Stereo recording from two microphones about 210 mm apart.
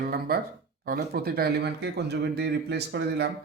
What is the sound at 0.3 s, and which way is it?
Speech, 45° right (ahead or behind).